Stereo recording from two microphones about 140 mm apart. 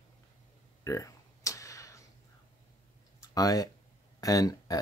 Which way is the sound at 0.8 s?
20° left (ahead or behind).